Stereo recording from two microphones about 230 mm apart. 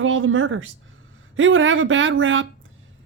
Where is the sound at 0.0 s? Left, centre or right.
Right.